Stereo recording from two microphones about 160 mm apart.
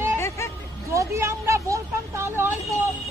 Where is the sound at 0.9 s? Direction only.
20° right (ahead or behind).